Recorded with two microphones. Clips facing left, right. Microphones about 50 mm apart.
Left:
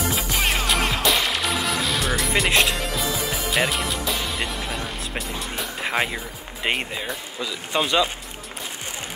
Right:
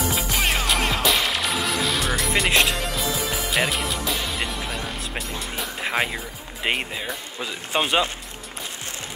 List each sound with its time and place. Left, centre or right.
0.3 s music: centre
7.7 s speech: centre